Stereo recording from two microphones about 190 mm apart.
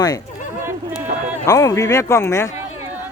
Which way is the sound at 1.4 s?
15° left (ahead or behind).